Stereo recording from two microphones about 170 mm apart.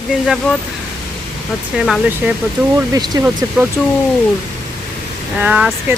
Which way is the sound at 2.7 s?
20° right (ahead or behind).